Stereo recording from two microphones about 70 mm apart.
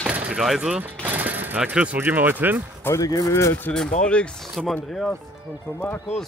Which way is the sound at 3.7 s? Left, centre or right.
Centre.